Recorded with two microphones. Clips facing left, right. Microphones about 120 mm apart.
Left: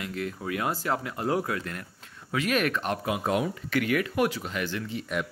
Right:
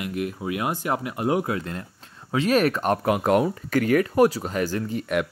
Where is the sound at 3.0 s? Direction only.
60° right (ahead or behind).